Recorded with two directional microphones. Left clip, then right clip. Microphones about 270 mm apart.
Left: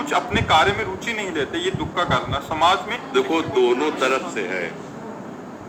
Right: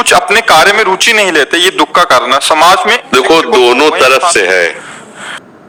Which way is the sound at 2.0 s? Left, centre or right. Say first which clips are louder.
Right 14 dB; right.